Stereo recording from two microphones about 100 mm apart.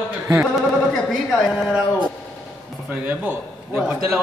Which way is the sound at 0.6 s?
5° left (ahead or behind).